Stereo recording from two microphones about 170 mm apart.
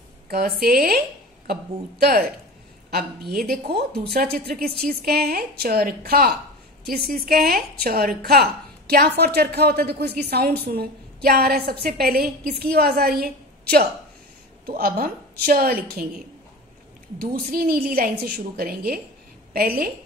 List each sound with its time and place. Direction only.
0.3 s a woman's voice: 65° right (ahead or behind)
17.2 s a woman's voice: 60° right (ahead or behind)